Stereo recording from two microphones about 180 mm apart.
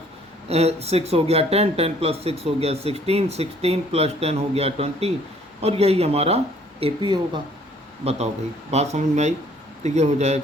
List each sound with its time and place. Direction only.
0.4 s speech: 35° right (ahead or behind)